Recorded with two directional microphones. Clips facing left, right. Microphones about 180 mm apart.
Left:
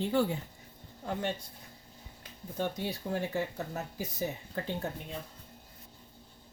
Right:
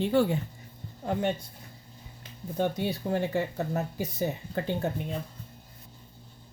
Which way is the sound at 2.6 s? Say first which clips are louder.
Right 6 dB; 65° right (ahead or behind).